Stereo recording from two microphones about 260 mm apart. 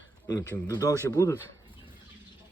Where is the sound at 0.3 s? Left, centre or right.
Centre.